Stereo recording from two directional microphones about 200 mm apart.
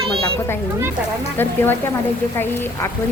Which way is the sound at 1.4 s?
10° left (ahead or behind).